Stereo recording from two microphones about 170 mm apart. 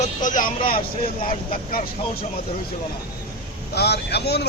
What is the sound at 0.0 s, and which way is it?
Vehicle, 50° left (ahead or behind).